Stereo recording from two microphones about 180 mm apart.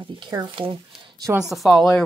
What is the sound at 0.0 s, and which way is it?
Speech, 25° right (ahead or behind).